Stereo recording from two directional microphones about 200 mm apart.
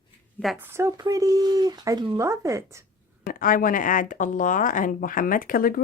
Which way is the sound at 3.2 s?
45° left (ahead or behind).